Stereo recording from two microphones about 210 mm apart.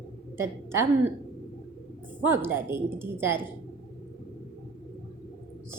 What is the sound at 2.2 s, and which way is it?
A woman's voice, 10° right (ahead or behind).